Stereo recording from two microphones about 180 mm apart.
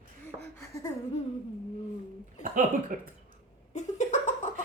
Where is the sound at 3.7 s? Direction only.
40° left (ahead or behind).